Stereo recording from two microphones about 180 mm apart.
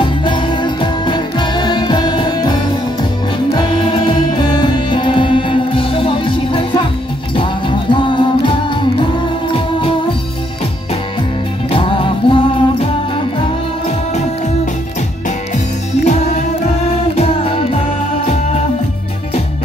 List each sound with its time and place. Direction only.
0.0 s music: 25° left (ahead or behind)
11.7 s music: 30° left (ahead or behind)
15.2 s music: 40° left (ahead or behind)